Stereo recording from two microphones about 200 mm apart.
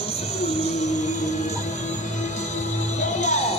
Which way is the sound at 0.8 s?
35° left (ahead or behind).